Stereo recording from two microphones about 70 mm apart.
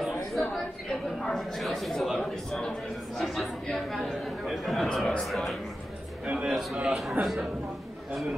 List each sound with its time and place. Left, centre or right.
0.0 s a woman's voice: centre
5.2 s a man's voice: centre
6.2 s a man's voice: centre
6.5 s a man's voice: centre
7.2 s a woman's voice: right
8.1 s a man's voice: centre